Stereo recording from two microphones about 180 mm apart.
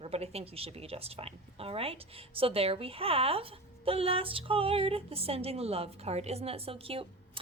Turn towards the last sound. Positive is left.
turn(degrees=-30)  # may be behind; listen again after turning